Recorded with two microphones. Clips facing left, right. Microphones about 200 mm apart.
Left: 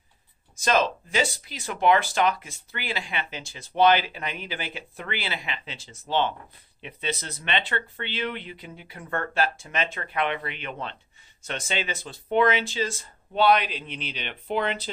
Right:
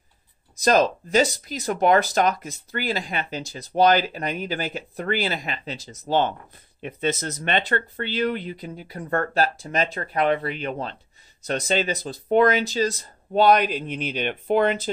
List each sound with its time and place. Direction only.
0.6 s speech: 40° right (ahead or behind)